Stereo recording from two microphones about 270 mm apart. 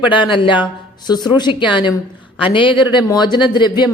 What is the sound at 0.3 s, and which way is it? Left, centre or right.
A woman's voice, centre.